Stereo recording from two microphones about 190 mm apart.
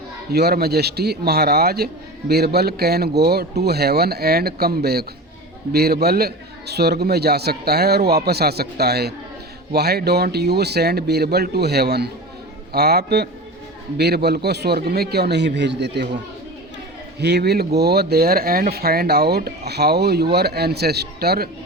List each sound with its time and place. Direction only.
0.3 s a man's voice: 55° right (ahead or behind)
17.2 s a man's voice: 60° right (ahead or behind)